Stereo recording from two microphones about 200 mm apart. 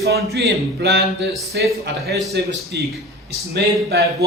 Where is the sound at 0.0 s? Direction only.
55° right (ahead or behind).